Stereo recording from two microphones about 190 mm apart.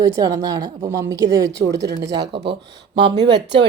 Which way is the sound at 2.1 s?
65° right (ahead or behind).